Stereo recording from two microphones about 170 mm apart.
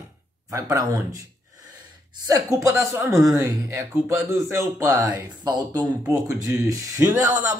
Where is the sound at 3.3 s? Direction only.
20° right (ahead or behind).